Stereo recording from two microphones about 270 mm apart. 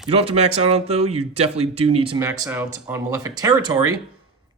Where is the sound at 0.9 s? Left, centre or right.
Right.